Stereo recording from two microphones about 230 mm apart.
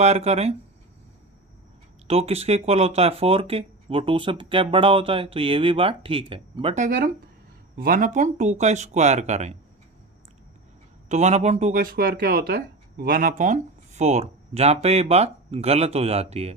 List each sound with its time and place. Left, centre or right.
0.0 s speech: right
2.0 s speech: right
11.1 s speech: right